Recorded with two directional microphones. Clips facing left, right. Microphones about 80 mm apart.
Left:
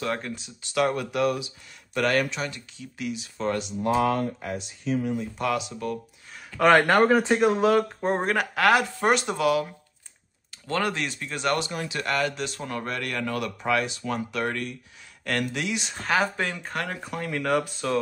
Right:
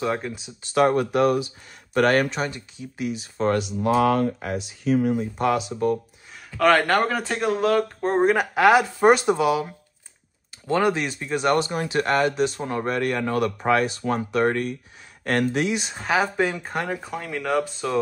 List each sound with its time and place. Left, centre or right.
0.0 s speech: centre
0.7 s speech: right
2.4 s speech: right
3.1 s speech: right
3.5 s speech: right
5.4 s speech: right
6.6 s speech: centre
8.2 s speech: centre
8.5 s speech: centre
10.7 s speech: centre
11.5 s speech: right
15.8 s speech: centre